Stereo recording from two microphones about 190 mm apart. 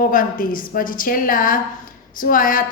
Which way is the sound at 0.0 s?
45° left (ahead or behind).